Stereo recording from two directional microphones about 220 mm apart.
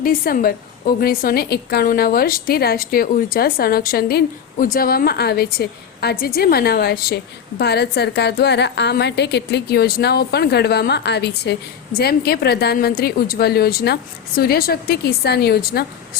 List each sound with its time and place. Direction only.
0.0 s a woman's voice: 40° left (ahead or behind)